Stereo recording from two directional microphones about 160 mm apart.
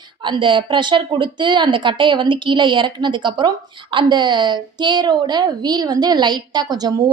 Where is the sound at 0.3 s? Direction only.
30° right (ahead or behind).